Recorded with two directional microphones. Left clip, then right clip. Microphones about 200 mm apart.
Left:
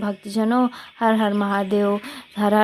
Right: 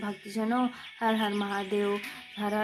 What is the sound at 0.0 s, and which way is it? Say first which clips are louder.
A woman's voice: left 9 dB; 40° left (ahead or behind).